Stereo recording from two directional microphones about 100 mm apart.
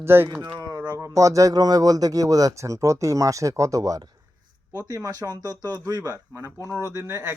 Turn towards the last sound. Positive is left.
turn(degrees=-25)  # may be behind; listen again after turning